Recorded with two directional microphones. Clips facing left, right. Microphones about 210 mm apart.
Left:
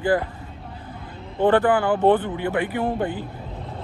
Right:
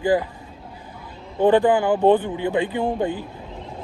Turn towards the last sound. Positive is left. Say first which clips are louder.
# right 1 dB
turn(degrees=-15)  # may be behind; listen again after turning